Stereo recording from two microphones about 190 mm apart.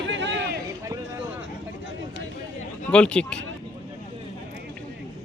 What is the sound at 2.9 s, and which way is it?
Speech, 5° left (ahead or behind).